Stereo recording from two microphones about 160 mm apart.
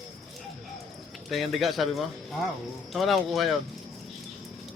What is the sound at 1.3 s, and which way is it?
A man's voice, centre (ahead or behind).